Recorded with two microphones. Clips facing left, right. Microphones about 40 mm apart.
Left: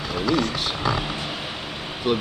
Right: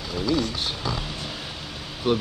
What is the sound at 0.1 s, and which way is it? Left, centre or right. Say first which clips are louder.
Speech: left 2 dB; left.